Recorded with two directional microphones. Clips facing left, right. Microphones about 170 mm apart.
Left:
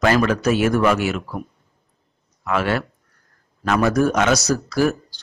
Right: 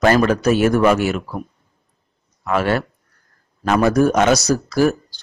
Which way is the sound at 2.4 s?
40° right (ahead or behind).